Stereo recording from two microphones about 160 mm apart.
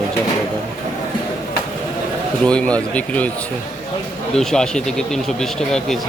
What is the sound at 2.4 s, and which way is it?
Speech, 5° left (ahead or behind).